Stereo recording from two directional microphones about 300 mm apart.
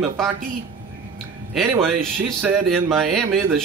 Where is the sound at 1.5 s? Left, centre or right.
Centre.